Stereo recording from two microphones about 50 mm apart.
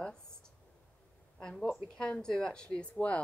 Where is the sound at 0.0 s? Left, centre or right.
Centre.